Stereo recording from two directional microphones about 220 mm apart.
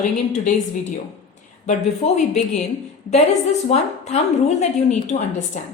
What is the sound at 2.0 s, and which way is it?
Speech, 30° left (ahead or behind).